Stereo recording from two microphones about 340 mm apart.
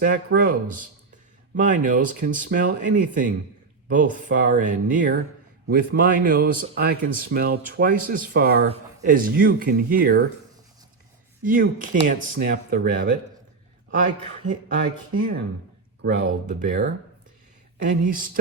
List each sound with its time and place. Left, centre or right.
0.0 s speech: right
11.4 s speech: right
14.4 s speech: right
18.0 s speech: right